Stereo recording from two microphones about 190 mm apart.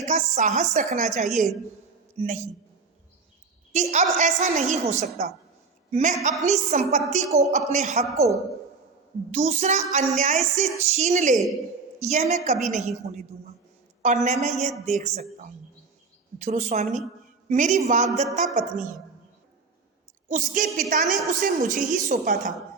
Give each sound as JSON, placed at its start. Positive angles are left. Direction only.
{"t": 0.0, "sound": "female singing", "side_deg": -40}
{"t": 2.1, "sound": "a man's voice", "side_deg": -35}
{"t": 3.7, "sound": "female singing", "side_deg": -40}
{"t": 9.3, "sound": "female singing", "side_deg": -35}
{"t": 20.2, "sound": "a woman's voice", "side_deg": -40}
{"t": 20.9, "sound": "female singing", "side_deg": -40}
{"t": 21.2, "sound": "a woman's voice", "side_deg": -45}